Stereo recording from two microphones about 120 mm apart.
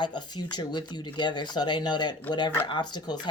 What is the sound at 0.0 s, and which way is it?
Speech, 40° left (ahead or behind).